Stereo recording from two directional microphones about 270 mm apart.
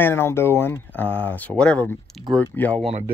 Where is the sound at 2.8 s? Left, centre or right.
Right.